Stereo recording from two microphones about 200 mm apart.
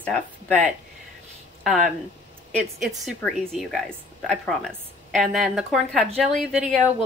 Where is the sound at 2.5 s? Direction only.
Centre (ahead or behind).